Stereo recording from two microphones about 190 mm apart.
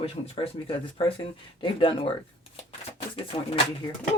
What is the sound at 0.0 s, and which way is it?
Speech, 30° left (ahead or behind).